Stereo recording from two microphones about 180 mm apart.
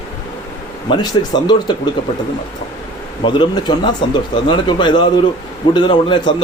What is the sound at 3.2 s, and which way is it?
A man's voice, 25° left (ahead or behind).